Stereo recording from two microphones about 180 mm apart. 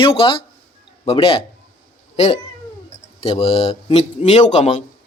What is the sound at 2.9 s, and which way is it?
Speech, 35° left (ahead or behind).